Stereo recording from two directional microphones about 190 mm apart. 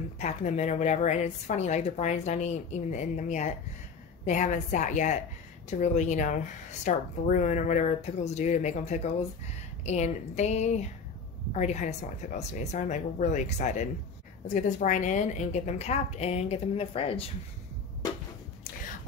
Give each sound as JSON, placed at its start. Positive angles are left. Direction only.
{"t": 0.2, "sound": "a woman's voice", "side_deg": 40}